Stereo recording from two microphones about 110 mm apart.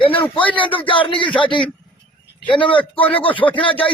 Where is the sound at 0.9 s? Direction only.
50° left (ahead or behind).